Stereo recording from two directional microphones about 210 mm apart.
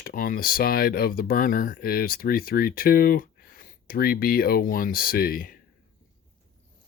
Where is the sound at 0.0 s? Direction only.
40° left (ahead or behind).